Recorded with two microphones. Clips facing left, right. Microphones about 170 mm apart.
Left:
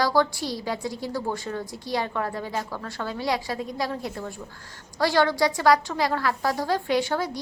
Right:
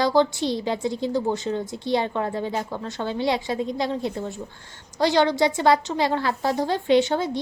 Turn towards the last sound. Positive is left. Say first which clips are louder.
# right 5 dB
turn(degrees=-25)  # may be behind; listen again after turning